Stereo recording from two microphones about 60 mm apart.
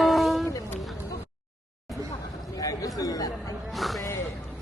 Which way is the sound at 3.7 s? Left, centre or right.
Centre.